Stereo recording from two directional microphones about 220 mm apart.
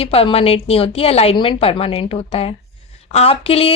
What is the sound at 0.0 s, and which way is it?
A woman's voice, 25° left (ahead or behind).